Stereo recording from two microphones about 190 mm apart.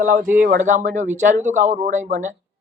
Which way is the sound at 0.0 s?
45° right (ahead or behind).